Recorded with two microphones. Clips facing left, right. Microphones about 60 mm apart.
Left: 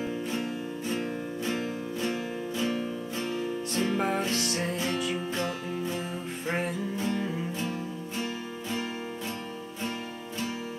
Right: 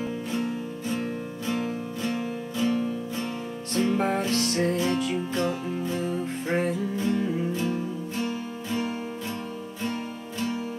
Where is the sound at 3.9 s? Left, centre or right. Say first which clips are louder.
Right 3 dB; centre.